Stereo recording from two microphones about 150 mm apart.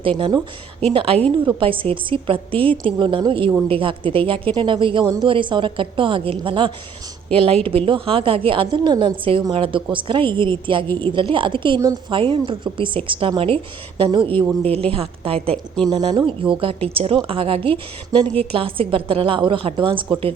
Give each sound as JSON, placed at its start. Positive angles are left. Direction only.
{"t": 0.2, "sound": "a woman's voice", "side_deg": -30}
{"t": 15.5, "sound": "speech", "side_deg": 5}
{"t": 15.9, "sound": "a woman's voice", "side_deg": -30}